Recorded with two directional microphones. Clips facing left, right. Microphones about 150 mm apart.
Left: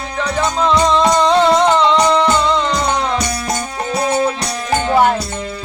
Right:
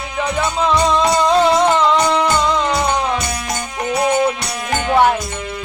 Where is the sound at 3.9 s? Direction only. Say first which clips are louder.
Right 1 dB; 35° left (ahead or behind).